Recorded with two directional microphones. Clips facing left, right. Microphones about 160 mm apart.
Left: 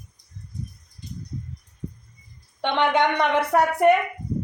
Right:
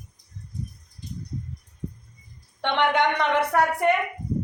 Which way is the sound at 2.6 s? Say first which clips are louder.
Left 1 dB; 15° left (ahead or behind).